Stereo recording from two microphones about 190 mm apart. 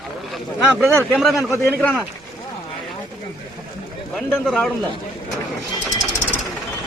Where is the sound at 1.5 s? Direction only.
10° left (ahead or behind).